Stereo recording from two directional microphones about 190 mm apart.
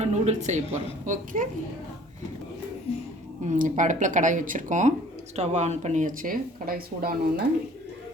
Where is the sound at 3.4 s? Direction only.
40° right (ahead or behind).